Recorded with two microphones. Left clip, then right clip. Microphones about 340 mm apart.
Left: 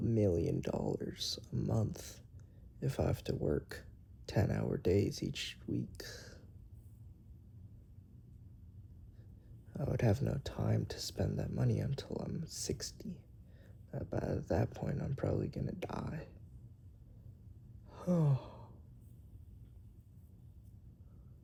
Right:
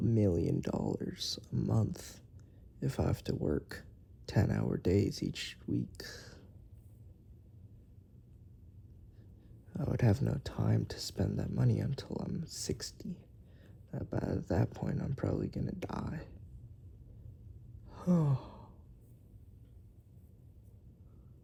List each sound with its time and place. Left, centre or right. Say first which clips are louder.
0.0 s a sound: right 1 dB; right
0.6 s speech: right 1 dB; right
9.7 s speech: right 1 dB; centre
17.8 s sigh: right 1 dB; right